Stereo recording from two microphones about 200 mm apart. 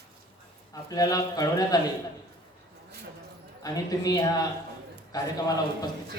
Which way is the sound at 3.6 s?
20° left (ahead or behind).